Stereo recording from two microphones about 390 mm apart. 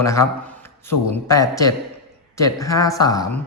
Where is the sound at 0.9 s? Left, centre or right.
Left.